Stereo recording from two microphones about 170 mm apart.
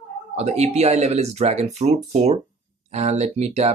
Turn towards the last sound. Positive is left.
turn(degrees=-40)  # may be behind; listen again after turning